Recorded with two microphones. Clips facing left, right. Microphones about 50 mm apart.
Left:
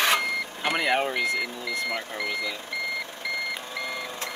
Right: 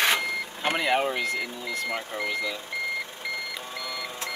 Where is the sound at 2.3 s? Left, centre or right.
Right.